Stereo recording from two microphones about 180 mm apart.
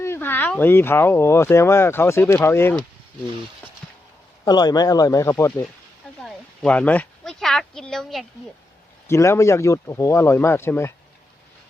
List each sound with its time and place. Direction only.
0.0 s speech: 10° left (ahead or behind)
4.4 s speech: 20° left (ahead or behind)
6.2 s a sound: 5° left (ahead or behind)
9.0 s speech: 15° left (ahead or behind)